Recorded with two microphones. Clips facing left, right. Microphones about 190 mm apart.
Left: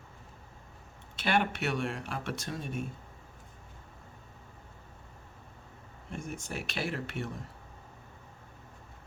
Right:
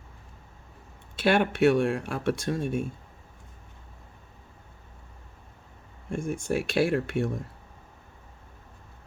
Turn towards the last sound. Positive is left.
turn(degrees=-55)  # may be behind; listen again after turning